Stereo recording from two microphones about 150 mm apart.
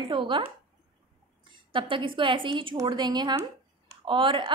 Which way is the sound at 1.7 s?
35° right (ahead or behind).